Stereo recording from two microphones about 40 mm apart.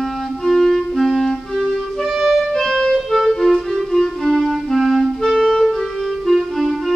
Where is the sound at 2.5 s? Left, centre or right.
Centre.